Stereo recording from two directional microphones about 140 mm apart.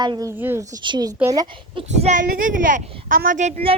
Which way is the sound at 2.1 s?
70° right (ahead or behind).